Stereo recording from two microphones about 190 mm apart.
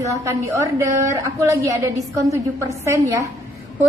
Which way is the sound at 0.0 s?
15° right (ahead or behind).